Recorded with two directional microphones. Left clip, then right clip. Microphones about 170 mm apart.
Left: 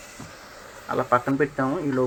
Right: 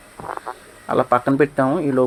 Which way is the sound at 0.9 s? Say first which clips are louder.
Right 5 dB; 40° right (ahead or behind).